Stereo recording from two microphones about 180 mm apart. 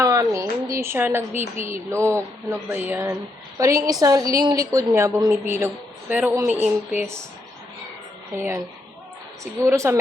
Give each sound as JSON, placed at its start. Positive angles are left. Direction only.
{"t": 0.0, "sound": "a sound", "side_deg": -15}
{"t": 0.7, "sound": "a woman's voice", "side_deg": -15}
{"t": 8.4, "sound": "a woman's voice", "side_deg": -15}